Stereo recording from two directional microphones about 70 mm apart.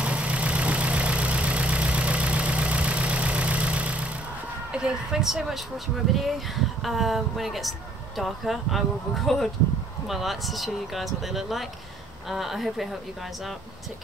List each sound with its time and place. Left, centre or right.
0.0 s vehicle: centre
4.7 s speech: centre